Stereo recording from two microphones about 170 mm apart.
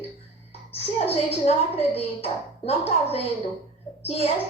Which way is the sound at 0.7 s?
35° left (ahead or behind).